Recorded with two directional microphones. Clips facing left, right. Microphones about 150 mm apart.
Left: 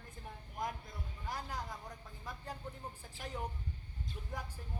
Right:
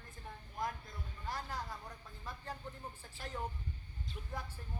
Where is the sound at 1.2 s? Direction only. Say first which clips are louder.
Even; 15° left (ahead or behind).